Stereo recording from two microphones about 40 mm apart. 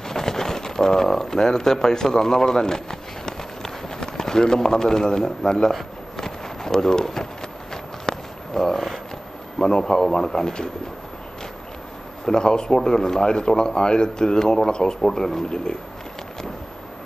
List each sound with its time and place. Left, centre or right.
0.0 s a sound: centre
7.7 s walk: centre
9.6 s speech: centre
12.3 s speech: centre